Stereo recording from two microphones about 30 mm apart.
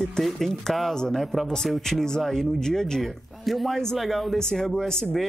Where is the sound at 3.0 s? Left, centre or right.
Centre.